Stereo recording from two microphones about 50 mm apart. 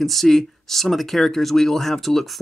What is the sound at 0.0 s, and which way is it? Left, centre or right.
Speech, centre.